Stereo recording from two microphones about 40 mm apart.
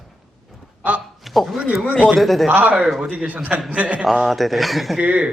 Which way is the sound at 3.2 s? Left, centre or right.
Right.